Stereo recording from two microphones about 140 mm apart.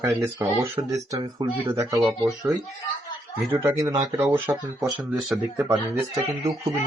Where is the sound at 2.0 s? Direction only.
Centre (ahead or behind).